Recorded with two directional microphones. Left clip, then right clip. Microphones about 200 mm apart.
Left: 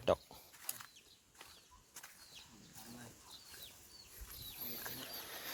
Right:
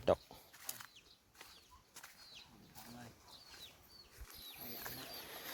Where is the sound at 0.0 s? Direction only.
25° right (ahead or behind).